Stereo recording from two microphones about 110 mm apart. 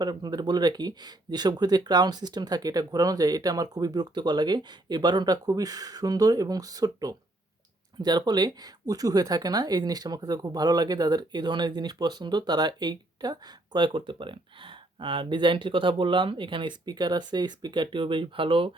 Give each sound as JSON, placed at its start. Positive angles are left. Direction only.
{"t": 0.0, "sound": "speech", "side_deg": -40}